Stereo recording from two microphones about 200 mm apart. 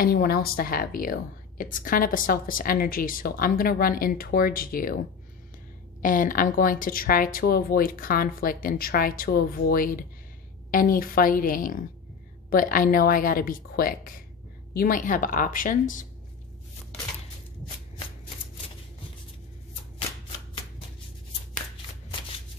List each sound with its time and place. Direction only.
0.0 s a woman's voice: 50° left (ahead or behind)
6.0 s a woman's voice: 40° left (ahead or behind)